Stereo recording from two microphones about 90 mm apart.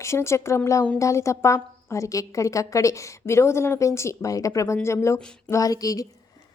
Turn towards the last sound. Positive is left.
turn(degrees=40)  # may be behind; listen again after turning